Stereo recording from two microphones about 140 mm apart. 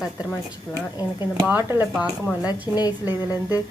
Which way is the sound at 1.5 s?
15° right (ahead or behind).